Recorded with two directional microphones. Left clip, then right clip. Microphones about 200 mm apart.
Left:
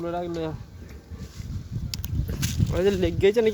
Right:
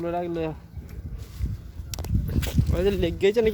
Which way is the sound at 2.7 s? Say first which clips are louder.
Left 1 dB; centre (ahead or behind).